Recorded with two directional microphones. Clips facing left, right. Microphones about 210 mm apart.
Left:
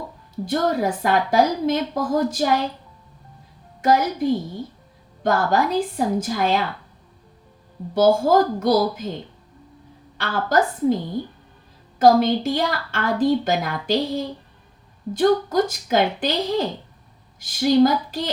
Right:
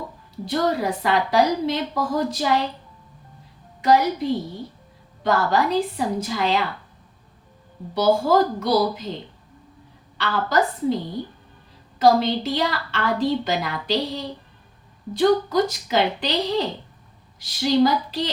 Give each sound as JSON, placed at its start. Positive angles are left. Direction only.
{"t": 0.4, "sound": "a woman's voice", "side_deg": 50}
{"t": 3.8, "sound": "a woman's voice", "side_deg": 45}
{"t": 7.9, "sound": "a woman's voice", "side_deg": 45}
{"t": 10.2, "sound": "a woman's voice", "side_deg": 45}
{"t": 11.9, "sound": "a woman's voice", "side_deg": 50}